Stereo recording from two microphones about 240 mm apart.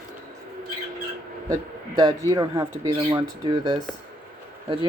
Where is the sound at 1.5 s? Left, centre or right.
Centre.